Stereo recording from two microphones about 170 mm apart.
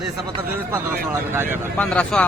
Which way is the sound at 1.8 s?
5° left (ahead or behind).